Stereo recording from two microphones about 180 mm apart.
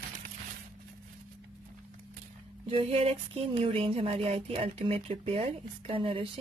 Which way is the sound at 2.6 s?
35° right (ahead or behind).